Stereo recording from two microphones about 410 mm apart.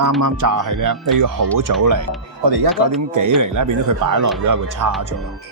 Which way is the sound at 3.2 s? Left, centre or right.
Right.